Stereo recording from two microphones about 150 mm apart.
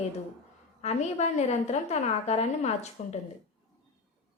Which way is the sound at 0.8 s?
45° left (ahead or behind).